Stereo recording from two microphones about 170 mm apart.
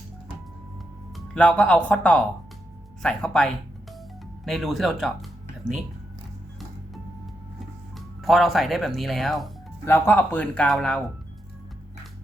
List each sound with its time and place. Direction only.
1.1 s speech: 5° left (ahead or behind)
7.9 s speech: centre (ahead or behind)
9.8 s speech: 15° left (ahead or behind)